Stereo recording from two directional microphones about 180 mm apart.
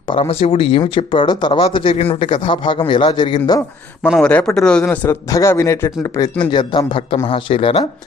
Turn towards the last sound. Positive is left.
turn(degrees=30)  # may be behind; listen again after turning